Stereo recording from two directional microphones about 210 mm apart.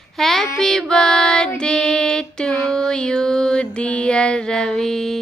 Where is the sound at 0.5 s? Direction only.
Centre (ahead or behind).